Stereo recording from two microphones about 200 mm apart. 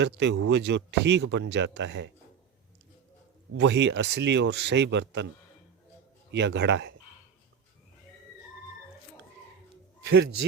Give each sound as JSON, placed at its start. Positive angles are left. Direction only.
{"t": 0.0, "sound": "speech", "side_deg": -60}
{"t": 3.5, "sound": "speech", "side_deg": -65}
{"t": 6.3, "sound": "speech", "side_deg": -60}